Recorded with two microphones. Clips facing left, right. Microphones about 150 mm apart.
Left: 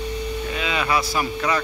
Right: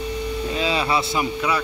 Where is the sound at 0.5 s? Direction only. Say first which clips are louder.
Right 1 dB; 30° right (ahead or behind).